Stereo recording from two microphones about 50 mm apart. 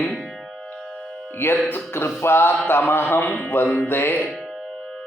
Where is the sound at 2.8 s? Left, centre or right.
Left.